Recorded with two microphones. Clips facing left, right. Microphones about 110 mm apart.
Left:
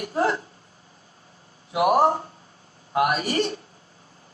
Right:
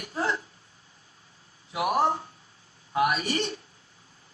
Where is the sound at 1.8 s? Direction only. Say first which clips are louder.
Left 6 dB; 45° left (ahead or behind).